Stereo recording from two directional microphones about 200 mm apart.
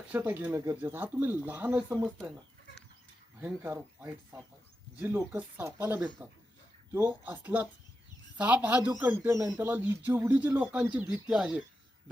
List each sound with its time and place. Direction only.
0.1 s speech: 10° right (ahead or behind)
3.4 s speech: 10° right (ahead or behind)